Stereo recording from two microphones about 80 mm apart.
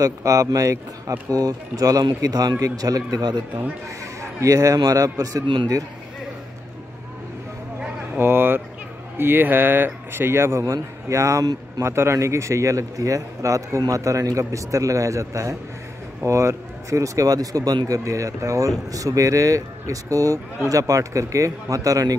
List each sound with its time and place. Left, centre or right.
0.0 s speech: right
4.0 s a sound: right
4.7 s speech: right
8.2 s a man's voice: right